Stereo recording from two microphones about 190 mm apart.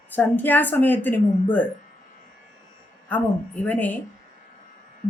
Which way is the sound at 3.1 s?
10° left (ahead or behind).